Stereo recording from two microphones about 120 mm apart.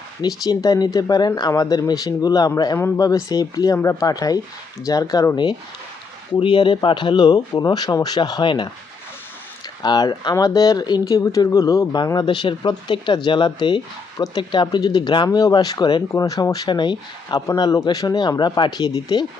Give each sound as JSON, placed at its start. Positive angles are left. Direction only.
{"t": 0.2, "sound": "speech", "side_deg": 30}
{"t": 6.3, "sound": "speech", "side_deg": 40}
{"t": 9.8, "sound": "speech", "side_deg": 35}